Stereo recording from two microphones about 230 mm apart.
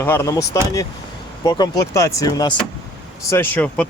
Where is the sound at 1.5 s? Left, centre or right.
Centre.